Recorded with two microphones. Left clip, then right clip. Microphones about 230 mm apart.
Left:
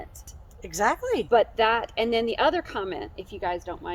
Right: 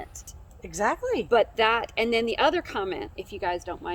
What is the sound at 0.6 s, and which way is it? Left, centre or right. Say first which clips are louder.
Speech: left 2 dB; left.